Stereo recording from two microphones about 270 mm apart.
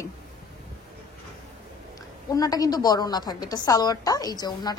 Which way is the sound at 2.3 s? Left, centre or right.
Centre.